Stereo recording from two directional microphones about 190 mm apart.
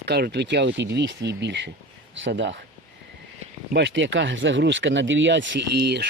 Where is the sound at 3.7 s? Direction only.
70° right (ahead or behind).